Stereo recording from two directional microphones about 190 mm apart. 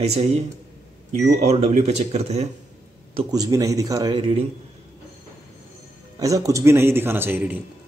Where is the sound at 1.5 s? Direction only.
35° right (ahead or behind).